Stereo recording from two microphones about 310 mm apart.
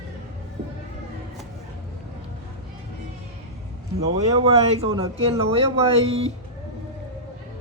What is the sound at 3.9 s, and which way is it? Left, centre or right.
Speech, centre.